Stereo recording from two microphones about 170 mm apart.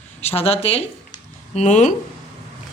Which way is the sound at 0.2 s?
35° left (ahead or behind).